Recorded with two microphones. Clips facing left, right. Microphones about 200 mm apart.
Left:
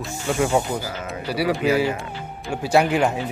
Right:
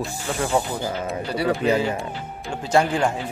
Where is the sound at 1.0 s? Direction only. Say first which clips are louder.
Left 1 dB; 5° left (ahead or behind).